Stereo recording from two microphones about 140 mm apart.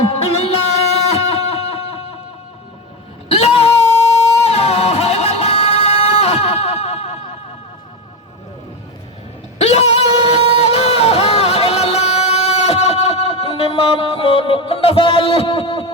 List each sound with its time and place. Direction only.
0.4 s music: 45° left (ahead or behind)
3.3 s wail: 45° left (ahead or behind)
4.4 s music: 45° left (ahead or behind)
9.6 s a sound: 50° left (ahead or behind)